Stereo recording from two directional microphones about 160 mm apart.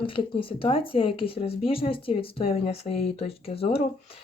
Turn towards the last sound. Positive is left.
turn(degrees=40)  # may be behind; listen again after turning